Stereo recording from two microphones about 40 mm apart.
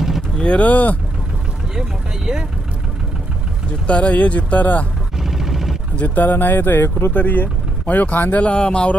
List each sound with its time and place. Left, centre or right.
0.4 s vehicle: left
0.7 s speech: left
1.8 s speech: centre
3.8 s speech: left
5.2 s a sound: centre
5.9 s speech: left
6.2 s speech: left
7.2 s speech: left